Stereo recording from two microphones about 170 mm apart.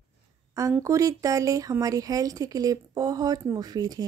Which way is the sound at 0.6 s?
20° right (ahead or behind).